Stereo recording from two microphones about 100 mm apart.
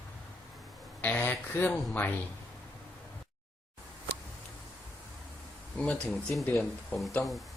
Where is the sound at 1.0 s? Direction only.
20° left (ahead or behind).